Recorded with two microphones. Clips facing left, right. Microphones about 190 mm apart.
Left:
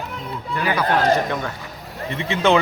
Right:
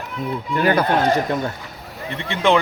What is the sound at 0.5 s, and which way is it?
Speech, 50° right (ahead or behind).